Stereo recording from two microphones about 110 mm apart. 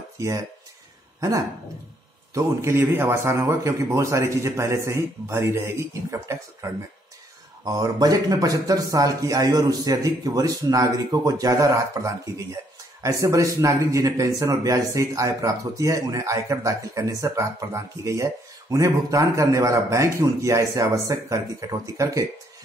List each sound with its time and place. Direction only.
0.2 s speech: 30° right (ahead or behind)
2.3 s speech: 25° right (ahead or behind)